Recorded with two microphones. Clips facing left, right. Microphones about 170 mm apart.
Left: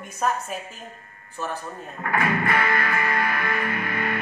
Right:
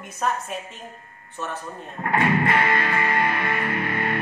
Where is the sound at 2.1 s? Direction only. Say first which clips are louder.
Right 3 dB; 30° right (ahead or behind).